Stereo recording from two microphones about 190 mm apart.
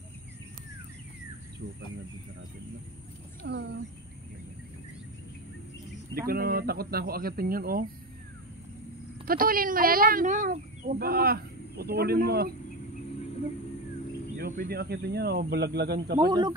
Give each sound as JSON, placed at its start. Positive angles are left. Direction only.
{"t": 3.4, "sound": "speech", "side_deg": -55}
{"t": 6.1, "sound": "speech", "side_deg": -50}
{"t": 9.2, "sound": "speech", "side_deg": -50}
{"t": 14.3, "sound": "speech", "side_deg": -50}
{"t": 16.2, "sound": "speech", "side_deg": -20}